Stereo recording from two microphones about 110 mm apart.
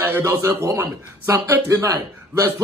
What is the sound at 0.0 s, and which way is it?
A man's voice, 25° right (ahead or behind).